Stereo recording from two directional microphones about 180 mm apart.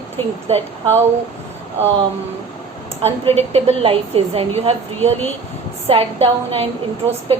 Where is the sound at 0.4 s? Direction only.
35° right (ahead or behind).